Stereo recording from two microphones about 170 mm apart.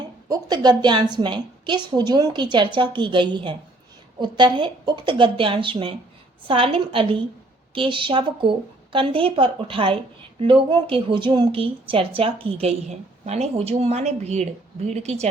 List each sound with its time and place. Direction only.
0.3 s a woman's voice: 25° right (ahead or behind); by 15.3 s 40° right (ahead or behind)